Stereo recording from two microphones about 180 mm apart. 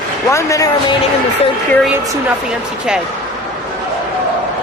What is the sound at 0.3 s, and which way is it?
Speech, 15° left (ahead or behind).